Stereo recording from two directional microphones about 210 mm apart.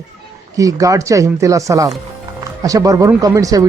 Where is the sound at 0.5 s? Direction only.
15° right (ahead or behind).